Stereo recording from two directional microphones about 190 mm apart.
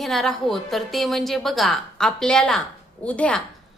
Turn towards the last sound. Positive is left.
turn(degrees=5)  # may be behind; listen again after turning